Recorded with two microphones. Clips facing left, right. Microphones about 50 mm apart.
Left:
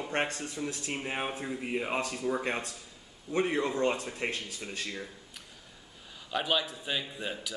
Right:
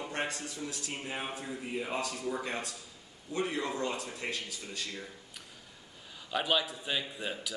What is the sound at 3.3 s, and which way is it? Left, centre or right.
A man's voice, left.